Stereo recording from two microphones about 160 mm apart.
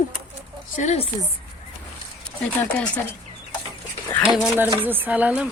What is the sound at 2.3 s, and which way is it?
Speech, 10° left (ahead or behind).